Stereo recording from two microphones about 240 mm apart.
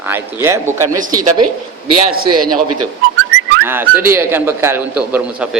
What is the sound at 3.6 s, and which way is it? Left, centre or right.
Speech, centre.